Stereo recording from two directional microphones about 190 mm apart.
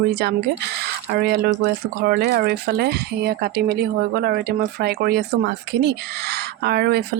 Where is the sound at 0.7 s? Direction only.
60° right (ahead or behind).